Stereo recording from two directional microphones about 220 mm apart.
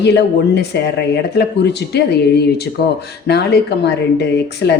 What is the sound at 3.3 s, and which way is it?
Speech, 50° left (ahead or behind).